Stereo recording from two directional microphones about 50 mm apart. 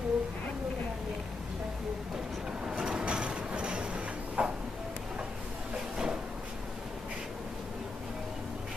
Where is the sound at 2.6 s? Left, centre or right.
Centre.